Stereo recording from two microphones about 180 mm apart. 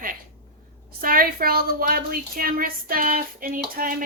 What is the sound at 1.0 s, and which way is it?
A woman's voice, 55° right (ahead or behind).